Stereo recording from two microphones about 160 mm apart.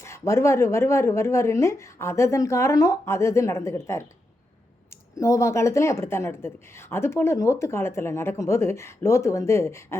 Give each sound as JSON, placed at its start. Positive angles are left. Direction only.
{"t": 0.0, "sound": "speech", "side_deg": 20}